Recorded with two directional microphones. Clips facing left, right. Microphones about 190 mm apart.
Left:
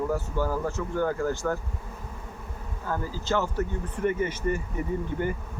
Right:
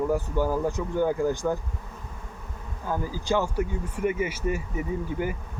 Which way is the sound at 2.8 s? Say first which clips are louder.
Right 2 dB; 15° right (ahead or behind).